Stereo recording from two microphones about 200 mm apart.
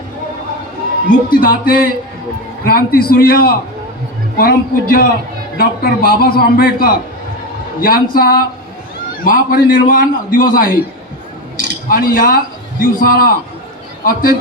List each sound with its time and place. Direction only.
1.3 s a man's voice: 45° left (ahead or behind)